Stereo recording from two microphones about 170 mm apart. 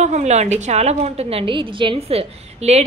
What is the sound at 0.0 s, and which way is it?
A woman's voice, 40° right (ahead or behind).